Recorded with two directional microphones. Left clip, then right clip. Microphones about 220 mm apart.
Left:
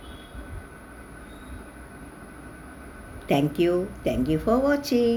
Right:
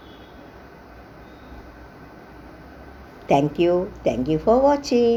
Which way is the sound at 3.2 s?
Centre (ahead or behind).